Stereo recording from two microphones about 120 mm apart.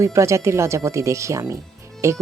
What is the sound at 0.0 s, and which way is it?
Speech, 25° right (ahead or behind).